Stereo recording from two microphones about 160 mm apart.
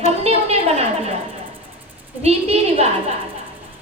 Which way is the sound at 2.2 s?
40° right (ahead or behind).